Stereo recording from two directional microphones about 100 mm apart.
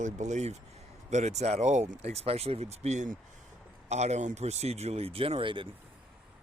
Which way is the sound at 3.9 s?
90° right.